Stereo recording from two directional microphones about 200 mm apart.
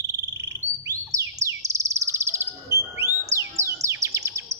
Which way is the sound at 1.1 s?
15° right (ahead or behind).